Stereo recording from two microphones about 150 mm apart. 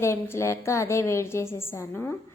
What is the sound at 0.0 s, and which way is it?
A woman's voice, 20° left (ahead or behind).